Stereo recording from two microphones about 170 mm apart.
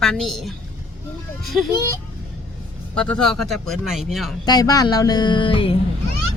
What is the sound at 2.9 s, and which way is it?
Speech, 5° left (ahead or behind).